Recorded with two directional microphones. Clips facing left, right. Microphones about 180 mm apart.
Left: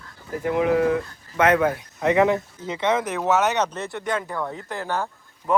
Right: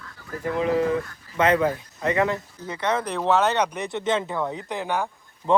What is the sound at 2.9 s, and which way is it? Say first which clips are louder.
Speech: left 1 dB; 10° left (ahead or behind).